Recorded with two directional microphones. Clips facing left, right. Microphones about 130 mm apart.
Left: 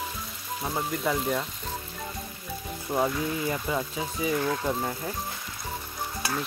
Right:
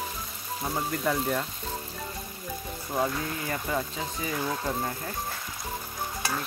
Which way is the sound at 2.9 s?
10° left (ahead or behind).